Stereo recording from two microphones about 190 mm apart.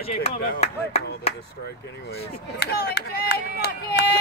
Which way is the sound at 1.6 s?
55° left (ahead or behind).